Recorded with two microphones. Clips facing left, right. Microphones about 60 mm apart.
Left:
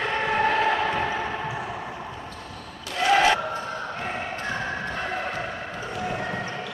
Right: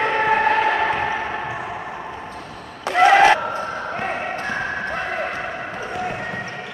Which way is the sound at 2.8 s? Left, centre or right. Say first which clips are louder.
Right 7 dB; right.